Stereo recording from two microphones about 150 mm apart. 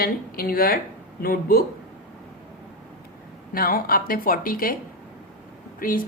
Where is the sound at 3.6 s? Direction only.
75° left (ahead or behind).